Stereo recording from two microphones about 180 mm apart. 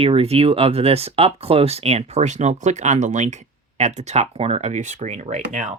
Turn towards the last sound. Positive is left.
turn(degrees=-40)  # may be behind; listen again after turning